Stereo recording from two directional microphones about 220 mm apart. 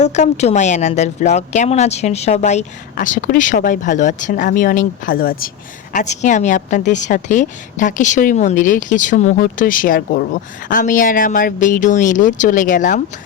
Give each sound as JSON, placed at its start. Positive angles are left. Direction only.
{"t": 0.0, "sound": "a woman's voice", "side_deg": 30}